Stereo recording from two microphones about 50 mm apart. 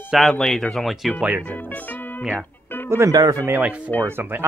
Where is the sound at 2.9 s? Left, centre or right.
Right.